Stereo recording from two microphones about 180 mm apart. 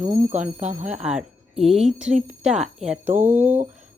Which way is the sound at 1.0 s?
5° right (ahead or behind).